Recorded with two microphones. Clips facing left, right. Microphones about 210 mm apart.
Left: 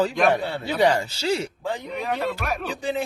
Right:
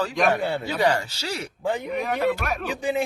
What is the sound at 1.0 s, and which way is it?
Speech, 30° left (ahead or behind).